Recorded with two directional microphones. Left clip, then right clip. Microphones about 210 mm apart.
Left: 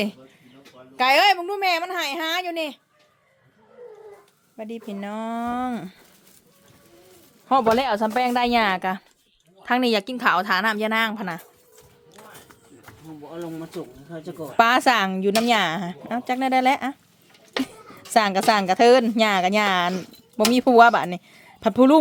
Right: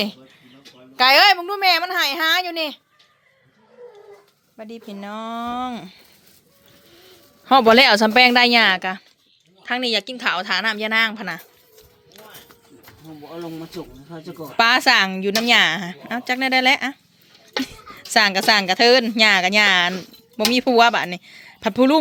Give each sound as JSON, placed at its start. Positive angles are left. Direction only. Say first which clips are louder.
{"t": 0.9, "sound": "a child's voice", "louder": "right 4 dB", "side_deg": 0}
{"t": 4.5, "sound": "speech", "louder": "left 2 dB", "side_deg": 20}
{"t": 7.4, "sound": "speech", "louder": "right 7 dB", "side_deg": -15}
{"t": 9.6, "sound": "speech", "louder": "even", "side_deg": 30}
{"t": 14.5, "sound": "a woman's voice", "louder": "right 2 dB", "side_deg": 20}